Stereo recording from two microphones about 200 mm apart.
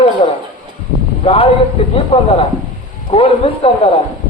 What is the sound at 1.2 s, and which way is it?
Speech, 30° left (ahead or behind).